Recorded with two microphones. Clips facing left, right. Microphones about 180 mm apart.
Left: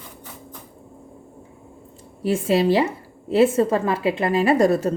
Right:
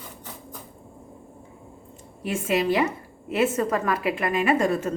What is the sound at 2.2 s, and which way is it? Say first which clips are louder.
A woman's voice: left 5 dB; 30° left (ahead or behind).